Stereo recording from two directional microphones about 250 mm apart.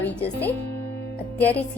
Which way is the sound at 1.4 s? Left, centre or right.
Centre.